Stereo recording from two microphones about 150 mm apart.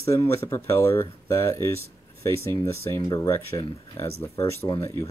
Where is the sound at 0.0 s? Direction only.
20° left (ahead or behind).